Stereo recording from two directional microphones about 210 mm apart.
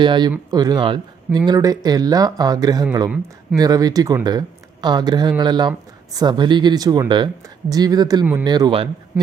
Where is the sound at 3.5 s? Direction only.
20° right (ahead or behind).